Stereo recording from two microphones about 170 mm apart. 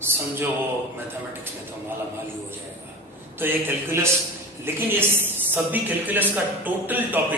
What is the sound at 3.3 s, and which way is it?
A man's voice, 10° right (ahead or behind).